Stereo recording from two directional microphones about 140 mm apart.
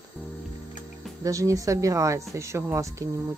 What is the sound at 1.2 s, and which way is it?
Speech, 25° right (ahead or behind).